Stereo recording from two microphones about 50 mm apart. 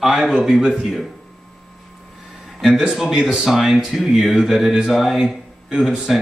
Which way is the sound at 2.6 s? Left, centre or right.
Centre.